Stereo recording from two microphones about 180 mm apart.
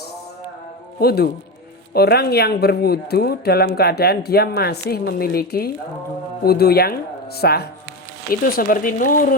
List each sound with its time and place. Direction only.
0.9 s speech: 60° left (ahead or behind)